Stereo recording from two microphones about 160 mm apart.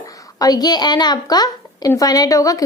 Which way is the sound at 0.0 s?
20° left (ahead or behind).